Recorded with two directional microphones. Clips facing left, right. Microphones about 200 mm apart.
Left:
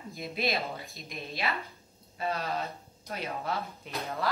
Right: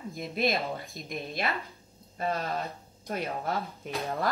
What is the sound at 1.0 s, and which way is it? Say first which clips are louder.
A woman's voice: right 2 dB; 50° right (ahead or behind).